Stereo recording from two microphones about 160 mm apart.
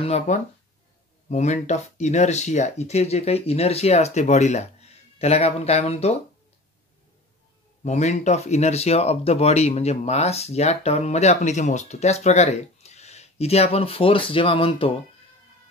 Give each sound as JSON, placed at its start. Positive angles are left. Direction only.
{"t": 0.0, "sound": "speech", "side_deg": 45}
{"t": 7.8, "sound": "speech", "side_deg": 45}